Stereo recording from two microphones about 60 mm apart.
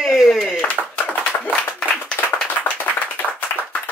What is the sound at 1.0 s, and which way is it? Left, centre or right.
Clapping, left.